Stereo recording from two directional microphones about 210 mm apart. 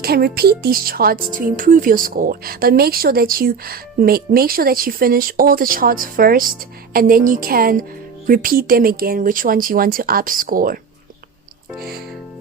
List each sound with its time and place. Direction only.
0.0 s speech: 45° right (ahead or behind)
11.8 s speech: 45° right (ahead or behind)